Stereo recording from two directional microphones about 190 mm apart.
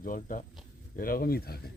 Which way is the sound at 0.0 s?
45° left (ahead or behind).